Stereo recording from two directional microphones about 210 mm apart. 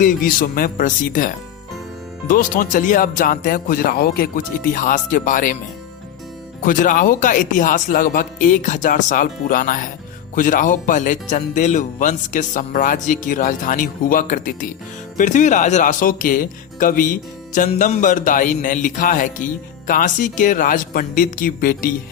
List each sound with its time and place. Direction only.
0.0 s speech: 40° left (ahead or behind)
6.7 s speech: 40° left (ahead or behind)